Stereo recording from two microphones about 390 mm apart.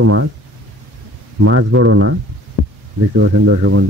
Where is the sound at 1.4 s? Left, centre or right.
Right.